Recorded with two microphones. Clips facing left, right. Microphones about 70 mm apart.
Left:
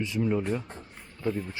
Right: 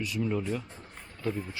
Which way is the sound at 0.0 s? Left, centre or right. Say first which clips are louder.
Left 3 dB; left.